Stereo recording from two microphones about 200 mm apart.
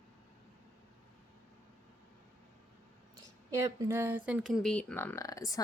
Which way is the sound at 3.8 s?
10° right (ahead or behind).